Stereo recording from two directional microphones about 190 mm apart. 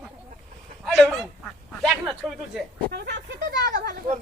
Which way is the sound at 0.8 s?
Centre (ahead or behind).